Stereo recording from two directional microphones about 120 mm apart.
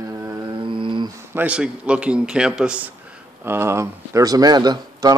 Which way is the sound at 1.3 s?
10° right (ahead or behind).